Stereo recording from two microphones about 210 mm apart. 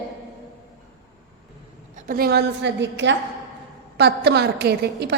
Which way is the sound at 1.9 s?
40° right (ahead or behind).